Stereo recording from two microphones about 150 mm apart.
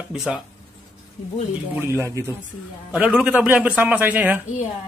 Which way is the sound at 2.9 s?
10° right (ahead or behind).